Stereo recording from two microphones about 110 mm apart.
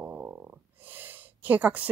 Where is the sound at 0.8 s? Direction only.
15° right (ahead or behind).